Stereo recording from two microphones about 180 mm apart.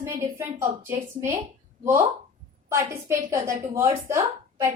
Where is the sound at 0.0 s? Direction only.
15° right (ahead or behind).